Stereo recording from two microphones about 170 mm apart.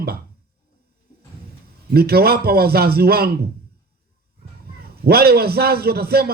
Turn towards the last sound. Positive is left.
turn(degrees=-65)  # may be behind; listen again after turning